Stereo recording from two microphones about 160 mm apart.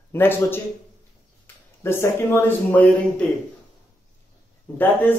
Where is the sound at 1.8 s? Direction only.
15° left (ahead or behind).